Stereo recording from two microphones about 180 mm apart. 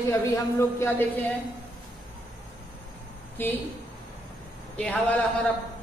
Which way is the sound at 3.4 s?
10° left (ahead or behind).